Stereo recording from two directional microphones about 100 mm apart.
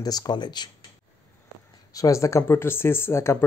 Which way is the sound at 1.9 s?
35° left (ahead or behind).